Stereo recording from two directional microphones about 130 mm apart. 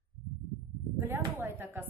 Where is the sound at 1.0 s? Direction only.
20° right (ahead or behind).